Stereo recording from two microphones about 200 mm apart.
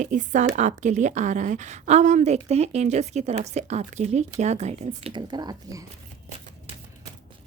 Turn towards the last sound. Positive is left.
turn(degrees=-20)  # may be behind; listen again after turning